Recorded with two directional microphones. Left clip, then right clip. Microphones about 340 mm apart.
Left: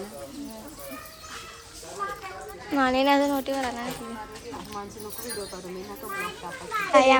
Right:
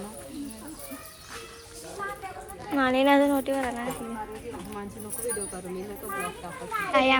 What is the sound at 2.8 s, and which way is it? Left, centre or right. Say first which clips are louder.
A woman's voice: even; centre.